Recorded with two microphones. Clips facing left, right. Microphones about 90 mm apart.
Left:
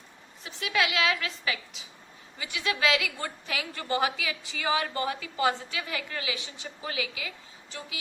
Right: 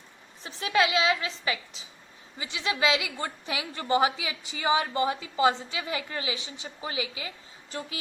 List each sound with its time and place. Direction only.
0.4 s a woman's voice: 30° right (ahead or behind)
7.7 s speech: 40° right (ahead or behind)